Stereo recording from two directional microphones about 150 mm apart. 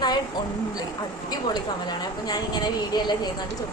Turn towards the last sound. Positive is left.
turn(degrees=25)  # may be behind; listen again after turning